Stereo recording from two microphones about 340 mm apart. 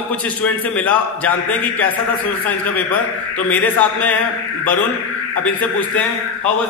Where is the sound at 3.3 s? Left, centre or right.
Centre.